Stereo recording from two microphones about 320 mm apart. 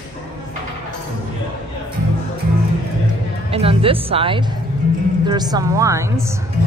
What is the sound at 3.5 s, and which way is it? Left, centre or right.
A woman's voice, centre.